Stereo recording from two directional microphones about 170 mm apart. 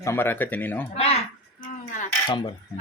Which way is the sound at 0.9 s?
35° left (ahead or behind).